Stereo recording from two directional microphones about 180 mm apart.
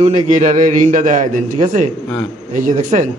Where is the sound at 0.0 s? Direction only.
45° right (ahead or behind).